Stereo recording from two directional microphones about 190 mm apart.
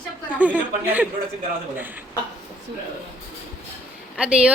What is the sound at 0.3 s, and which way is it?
Speech, 10° right (ahead or behind).